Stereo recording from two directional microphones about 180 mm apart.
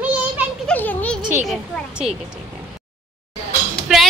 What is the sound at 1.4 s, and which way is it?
Speech, centre (ahead or behind).